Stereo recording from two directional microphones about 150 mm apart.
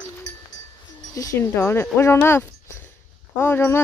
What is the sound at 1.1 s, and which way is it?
Speech, 20° left (ahead or behind).